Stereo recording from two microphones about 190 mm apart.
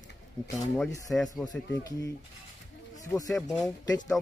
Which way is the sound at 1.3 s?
20° left (ahead or behind).